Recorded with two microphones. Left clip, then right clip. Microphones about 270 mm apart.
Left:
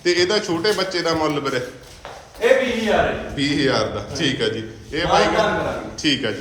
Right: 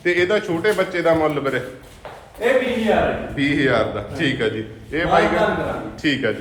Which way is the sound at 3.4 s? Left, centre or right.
Centre.